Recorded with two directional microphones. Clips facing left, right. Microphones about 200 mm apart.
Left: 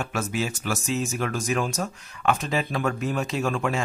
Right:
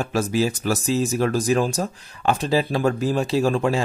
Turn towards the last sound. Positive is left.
turn(degrees=-30)  # may be behind; listen again after turning